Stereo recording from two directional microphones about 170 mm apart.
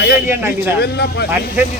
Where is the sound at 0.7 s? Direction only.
75° left (ahead or behind).